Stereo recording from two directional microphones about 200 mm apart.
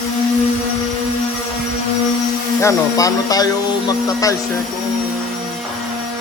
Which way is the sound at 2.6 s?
15° left (ahead or behind).